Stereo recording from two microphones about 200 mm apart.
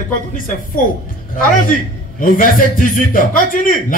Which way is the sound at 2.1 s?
45° left (ahead or behind).